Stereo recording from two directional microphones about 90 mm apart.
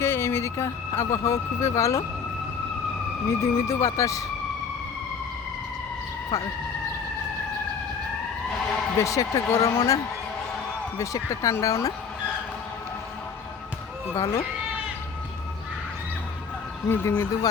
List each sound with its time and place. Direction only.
0.0 s speech: 30° left (ahead or behind)
3.2 s speech: 35° left (ahead or behind)
6.3 s speech: 40° left (ahead or behind)
9.0 s speech: 35° left (ahead or behind)
14.1 s speech: 30° left (ahead or behind)
16.9 s speech: 25° left (ahead or behind)